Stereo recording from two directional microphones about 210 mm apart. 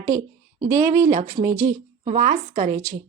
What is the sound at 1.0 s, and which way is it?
Speech, 35° right (ahead or behind).